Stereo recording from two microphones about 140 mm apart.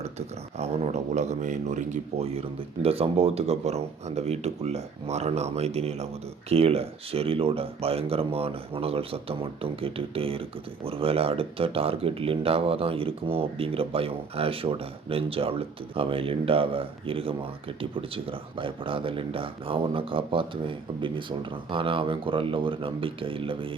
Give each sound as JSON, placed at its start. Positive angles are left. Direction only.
{"t": 0.6, "sound": "speech", "side_deg": -50}